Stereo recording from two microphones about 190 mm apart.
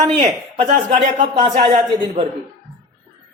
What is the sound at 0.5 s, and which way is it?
Speech, 30° right (ahead or behind).